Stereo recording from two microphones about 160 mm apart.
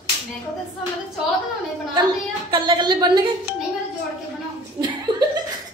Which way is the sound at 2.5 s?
30° right (ahead or behind).